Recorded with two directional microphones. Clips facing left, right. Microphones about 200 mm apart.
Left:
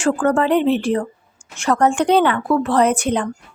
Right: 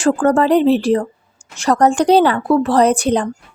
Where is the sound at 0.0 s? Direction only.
35° right (ahead or behind).